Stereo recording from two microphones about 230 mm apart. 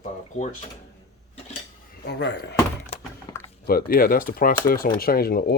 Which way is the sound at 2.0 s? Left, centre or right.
Left.